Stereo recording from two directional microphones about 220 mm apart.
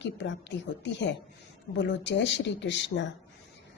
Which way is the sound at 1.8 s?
55° left (ahead or behind).